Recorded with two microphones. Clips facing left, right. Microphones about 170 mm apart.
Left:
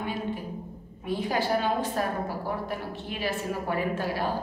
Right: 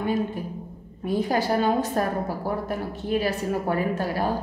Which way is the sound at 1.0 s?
45° right (ahead or behind).